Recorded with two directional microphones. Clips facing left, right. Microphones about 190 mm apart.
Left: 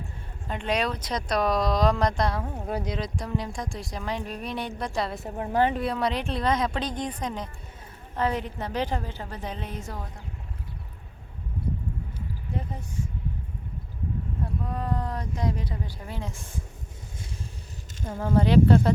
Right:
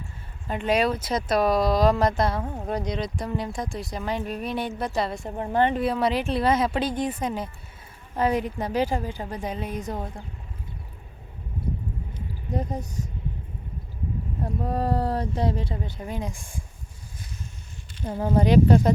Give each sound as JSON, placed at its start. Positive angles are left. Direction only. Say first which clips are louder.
{"t": 0.4, "sound": "a woman's voice", "louder": "right 4 dB", "side_deg": -5}
{"t": 12.5, "sound": "speech", "louder": "right 7 dB", "side_deg": -40}
{"t": 14.4, "sound": "speech", "louder": "right 7 dB", "side_deg": -35}
{"t": 18.1, "sound": "a woman's voice", "louder": "right 1 dB", "side_deg": -15}